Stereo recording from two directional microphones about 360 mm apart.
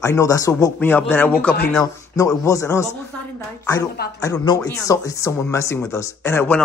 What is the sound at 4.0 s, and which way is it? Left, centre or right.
Speech, left.